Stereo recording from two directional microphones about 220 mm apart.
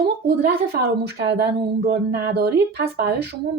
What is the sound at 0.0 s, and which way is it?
A woman's voice, 45° right (ahead or behind).